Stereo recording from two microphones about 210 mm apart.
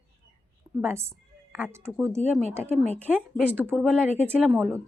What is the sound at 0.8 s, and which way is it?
A woman's voice, 10° right (ahead or behind).